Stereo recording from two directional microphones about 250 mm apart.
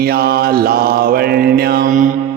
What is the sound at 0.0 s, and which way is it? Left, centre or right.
Mantra, right.